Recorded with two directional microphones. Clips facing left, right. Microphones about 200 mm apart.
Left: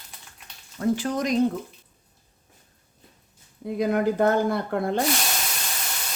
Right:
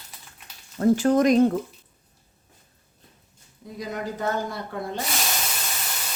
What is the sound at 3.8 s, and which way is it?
Speech, 55° left (ahead or behind).